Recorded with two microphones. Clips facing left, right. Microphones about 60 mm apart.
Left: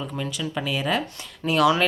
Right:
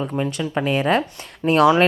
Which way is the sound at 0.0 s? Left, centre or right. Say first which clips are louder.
Right 6 dB; right.